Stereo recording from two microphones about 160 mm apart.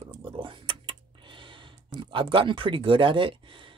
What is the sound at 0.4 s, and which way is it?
Speech, 30° right (ahead or behind).